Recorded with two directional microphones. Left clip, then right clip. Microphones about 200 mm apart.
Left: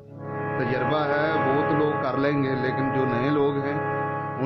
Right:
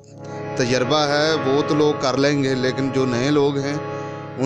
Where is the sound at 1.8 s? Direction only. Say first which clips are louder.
Right 5 dB; 50° right (ahead or behind).